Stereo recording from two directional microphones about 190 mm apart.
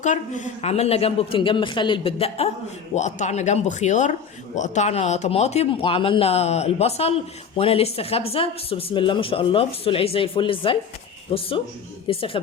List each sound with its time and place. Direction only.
0.0 s speech: 40° left (ahead or behind)